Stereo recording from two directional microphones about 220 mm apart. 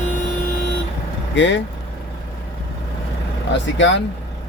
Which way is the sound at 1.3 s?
55° left (ahead or behind).